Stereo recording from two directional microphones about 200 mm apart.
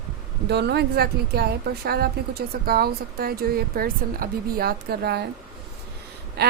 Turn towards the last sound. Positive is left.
turn(degrees=-55)  # may be behind; listen again after turning